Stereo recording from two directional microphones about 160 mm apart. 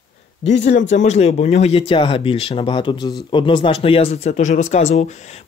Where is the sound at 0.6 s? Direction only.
50° left (ahead or behind).